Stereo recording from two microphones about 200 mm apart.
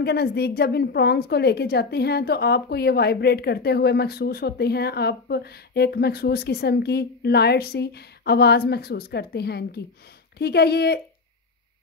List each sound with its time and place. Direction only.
0.0 s a woman's voice: 50° left (ahead or behind)